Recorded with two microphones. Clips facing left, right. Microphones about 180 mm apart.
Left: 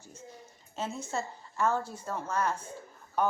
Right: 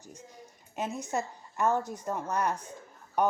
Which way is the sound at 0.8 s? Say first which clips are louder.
Right 2 dB; 15° right (ahead or behind).